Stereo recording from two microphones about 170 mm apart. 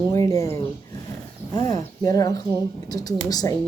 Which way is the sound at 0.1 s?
20° left (ahead or behind).